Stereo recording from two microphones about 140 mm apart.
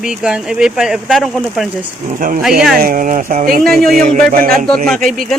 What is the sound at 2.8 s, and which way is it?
Speech, 85° right.